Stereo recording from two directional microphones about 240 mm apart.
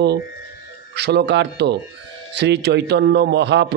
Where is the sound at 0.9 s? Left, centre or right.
Right.